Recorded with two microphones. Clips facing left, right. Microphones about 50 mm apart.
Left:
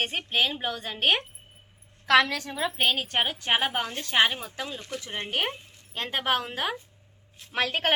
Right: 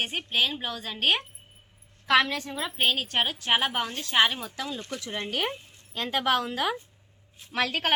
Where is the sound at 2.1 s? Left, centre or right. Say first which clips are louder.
Left 2 dB; left.